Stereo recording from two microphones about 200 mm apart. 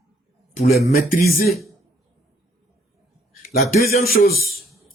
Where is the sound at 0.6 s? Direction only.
50° left (ahead or behind).